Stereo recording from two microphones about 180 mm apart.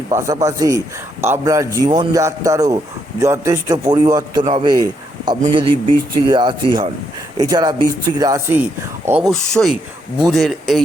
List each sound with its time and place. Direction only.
0.1 s a man's voice: 20° right (ahead or behind)
9.3 s speech: 5° left (ahead or behind)